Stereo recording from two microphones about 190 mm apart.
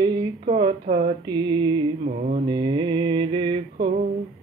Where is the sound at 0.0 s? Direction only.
20° right (ahead or behind).